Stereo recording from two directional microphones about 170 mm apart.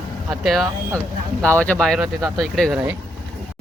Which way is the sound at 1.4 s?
5° left (ahead or behind).